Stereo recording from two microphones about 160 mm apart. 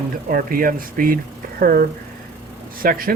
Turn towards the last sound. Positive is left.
turn(degrees=-65)  # may be behind; listen again after turning